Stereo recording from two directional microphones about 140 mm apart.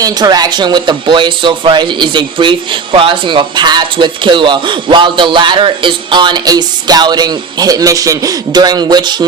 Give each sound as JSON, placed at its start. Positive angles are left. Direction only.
{"t": 0.0, "sound": "speech", "side_deg": -30}